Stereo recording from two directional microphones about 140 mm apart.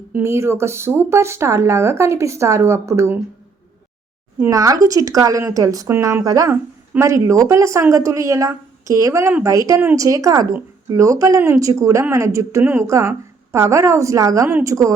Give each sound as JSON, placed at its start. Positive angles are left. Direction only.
{"t": 0.1, "sound": "speech", "side_deg": -20}
{"t": 4.4, "sound": "speech", "side_deg": -20}